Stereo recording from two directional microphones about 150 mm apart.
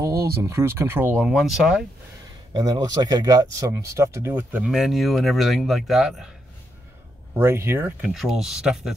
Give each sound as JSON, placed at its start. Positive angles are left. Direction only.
{"t": 0.0, "sound": "speech", "side_deg": -20}
{"t": 1.1, "sound": "speech", "side_deg": -5}
{"t": 2.5, "sound": "speech", "side_deg": -25}
{"t": 4.6, "sound": "speech", "side_deg": 0}
{"t": 7.3, "sound": "speech", "side_deg": -15}
{"t": 8.1, "sound": "speech", "side_deg": 0}